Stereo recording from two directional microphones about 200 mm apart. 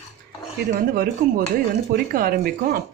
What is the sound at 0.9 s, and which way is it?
Speech, 45° right (ahead or behind).